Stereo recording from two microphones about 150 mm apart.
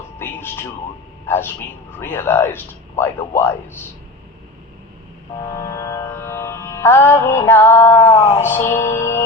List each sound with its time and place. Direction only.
0.2 s a sound: 15° left (ahead or behind)
2.0 s music: 15° left (ahead or behind)
5.5 s music: 20° left (ahead or behind)
8.1 s speech: 40° left (ahead or behind)
8.4 s music: 15° left (ahead or behind)